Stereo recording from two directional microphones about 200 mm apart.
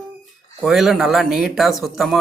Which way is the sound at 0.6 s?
Centre (ahead or behind).